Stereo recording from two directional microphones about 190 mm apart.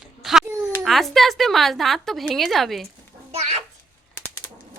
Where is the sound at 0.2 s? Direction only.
Centre (ahead or behind).